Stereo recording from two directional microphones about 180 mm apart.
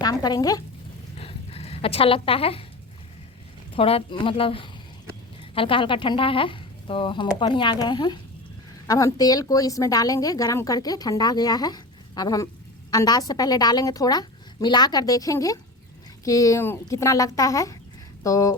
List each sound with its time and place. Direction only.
0.0 s speech: 20° left (ahead or behind)
1.2 s a sound: 35° left (ahead or behind)
3.8 s a woman's voice: 30° left (ahead or behind)